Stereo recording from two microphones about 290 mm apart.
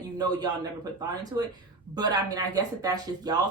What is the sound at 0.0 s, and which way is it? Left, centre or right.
A man's voice, centre.